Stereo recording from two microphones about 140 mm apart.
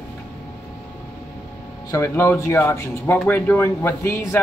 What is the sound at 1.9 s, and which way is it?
A man's voice, 20° left (ahead or behind).